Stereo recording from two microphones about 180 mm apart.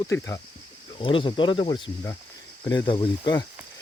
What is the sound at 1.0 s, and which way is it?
Speech, 30° left (ahead or behind).